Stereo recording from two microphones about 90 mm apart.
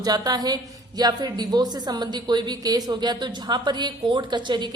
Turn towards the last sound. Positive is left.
turn(degrees=-60)  # may be behind; listen again after turning